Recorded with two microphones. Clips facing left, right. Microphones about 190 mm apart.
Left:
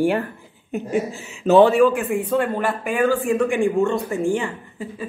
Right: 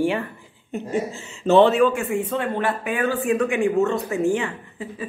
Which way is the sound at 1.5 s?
Centre (ahead or behind).